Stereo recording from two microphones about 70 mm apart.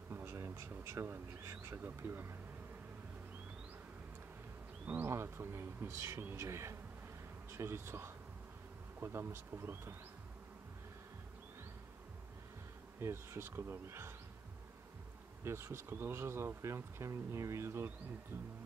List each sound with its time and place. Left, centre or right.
0.1 s bee: right
2.0 s speech: right
5.0 s speech: right
6.3 s bee: right
7.5 s speech: right
13.0 s speech: right
15.4 s speech: right